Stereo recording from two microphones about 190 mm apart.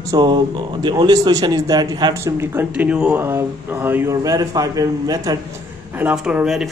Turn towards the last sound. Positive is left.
turn(degrees=-5)  # may be behind; listen again after turning